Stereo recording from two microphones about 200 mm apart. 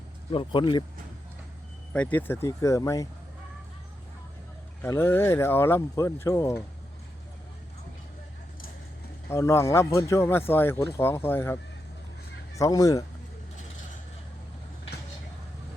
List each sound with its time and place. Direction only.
0.3 s speech: 25° left (ahead or behind)
1.9 s speech: 5° left (ahead or behind)
4.8 s speech: 10° left (ahead or behind)
9.3 s speech: 15° left (ahead or behind)
12.5 s speech: 15° left (ahead or behind)